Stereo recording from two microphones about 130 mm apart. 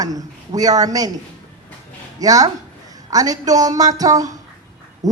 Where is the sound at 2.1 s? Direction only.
30° right (ahead or behind).